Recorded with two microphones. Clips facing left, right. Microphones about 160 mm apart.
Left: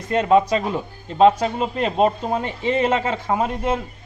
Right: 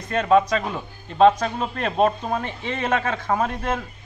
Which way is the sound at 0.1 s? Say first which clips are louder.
Left 2 dB; 20° left (ahead or behind).